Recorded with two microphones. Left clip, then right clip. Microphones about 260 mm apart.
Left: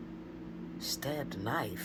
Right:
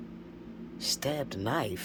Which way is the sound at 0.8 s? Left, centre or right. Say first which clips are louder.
Right 5 dB; right.